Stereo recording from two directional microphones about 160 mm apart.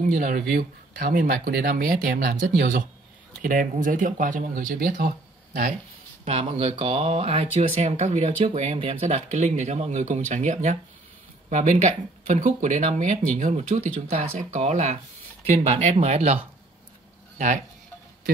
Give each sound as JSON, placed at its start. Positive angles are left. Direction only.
{"t": 0.0, "sound": "speech", "side_deg": -55}
{"t": 6.2, "sound": "speech", "side_deg": -40}